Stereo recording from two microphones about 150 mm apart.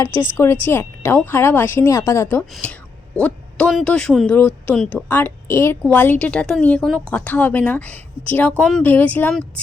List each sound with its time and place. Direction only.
0.0 s a woman's voice: 15° left (ahead or behind)